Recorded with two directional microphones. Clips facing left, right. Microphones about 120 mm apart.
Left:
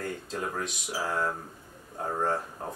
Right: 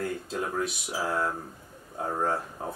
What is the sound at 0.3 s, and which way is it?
Speech, 5° right (ahead or behind).